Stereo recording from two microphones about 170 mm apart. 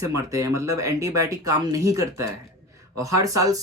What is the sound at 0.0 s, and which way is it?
Speech, 20° right (ahead or behind).